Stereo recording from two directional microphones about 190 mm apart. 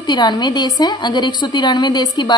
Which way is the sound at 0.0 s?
25° left (ahead or behind).